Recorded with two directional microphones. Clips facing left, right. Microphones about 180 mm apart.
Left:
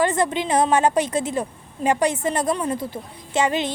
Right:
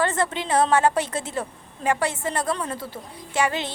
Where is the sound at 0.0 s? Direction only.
15° left (ahead or behind).